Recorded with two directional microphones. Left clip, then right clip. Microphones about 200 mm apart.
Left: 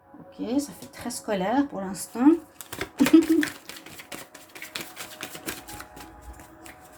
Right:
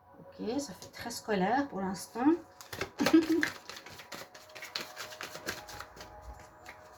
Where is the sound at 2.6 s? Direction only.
20° left (ahead or behind).